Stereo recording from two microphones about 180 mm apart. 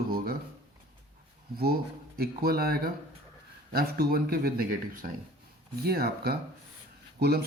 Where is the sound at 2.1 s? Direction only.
60° right (ahead or behind).